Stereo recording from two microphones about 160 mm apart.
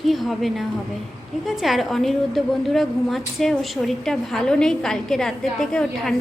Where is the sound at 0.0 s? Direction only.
Centre (ahead or behind).